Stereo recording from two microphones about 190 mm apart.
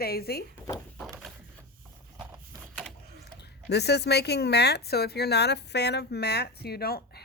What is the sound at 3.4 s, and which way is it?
Speech, 60° left (ahead or behind).